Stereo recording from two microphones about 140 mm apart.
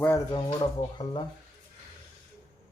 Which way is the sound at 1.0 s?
35° left (ahead or behind).